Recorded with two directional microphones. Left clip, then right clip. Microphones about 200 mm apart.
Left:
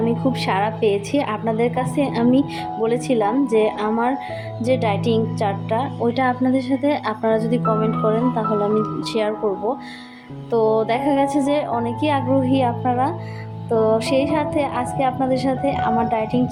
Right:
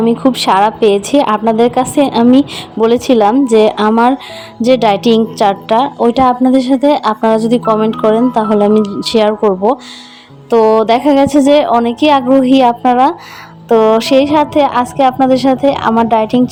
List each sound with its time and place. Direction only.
0.0 s a woman's voice: 40° right (ahead or behind)